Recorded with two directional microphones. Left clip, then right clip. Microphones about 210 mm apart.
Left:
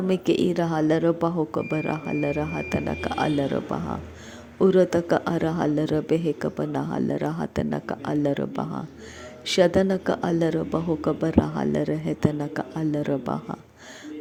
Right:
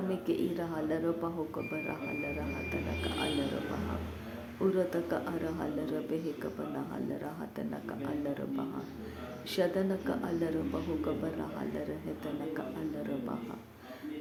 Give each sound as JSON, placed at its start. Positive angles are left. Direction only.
{"t": 0.1, "sound": "a woman's voice", "side_deg": 40}
{"t": 4.6, "sound": "a woman's voice", "side_deg": 40}